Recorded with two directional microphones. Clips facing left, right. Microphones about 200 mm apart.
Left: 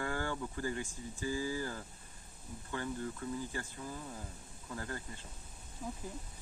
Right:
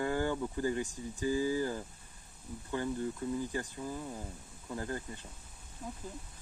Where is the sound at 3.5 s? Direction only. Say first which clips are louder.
Right 5 dB; 15° right (ahead or behind).